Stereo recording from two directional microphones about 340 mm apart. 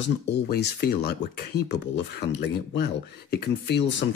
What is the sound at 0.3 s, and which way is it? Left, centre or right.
Speech, left.